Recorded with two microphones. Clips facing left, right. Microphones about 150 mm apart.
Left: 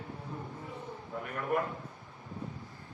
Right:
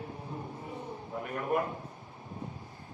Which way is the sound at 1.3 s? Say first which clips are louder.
Right 1 dB; 25° right (ahead or behind).